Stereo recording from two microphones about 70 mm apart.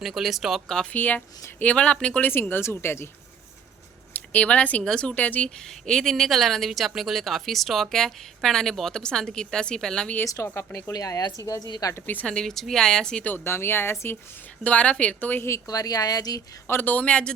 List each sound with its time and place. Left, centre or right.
0.0 s speech: centre
0.9 s a woman's voice: left
2.2 s speech: left
4.1 s speech: left
5.6 s speech: centre
10.2 s speech: left
11.9 s speech: left
12.2 s a woman's voice: centre
13.2 s speech: left
14.6 s speech: centre
15.6 s speech: left
16.6 s speech: left; by 17.3 s centre